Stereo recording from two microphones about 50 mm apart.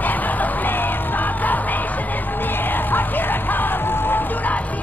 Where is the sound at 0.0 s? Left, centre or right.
Left.